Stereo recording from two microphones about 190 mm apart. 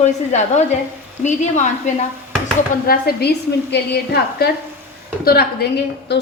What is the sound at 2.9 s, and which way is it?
A woman's voice, 55° left (ahead or behind).